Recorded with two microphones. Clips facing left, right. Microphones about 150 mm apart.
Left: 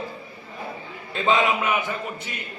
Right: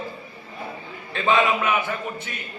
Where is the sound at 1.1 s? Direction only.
20° left (ahead or behind).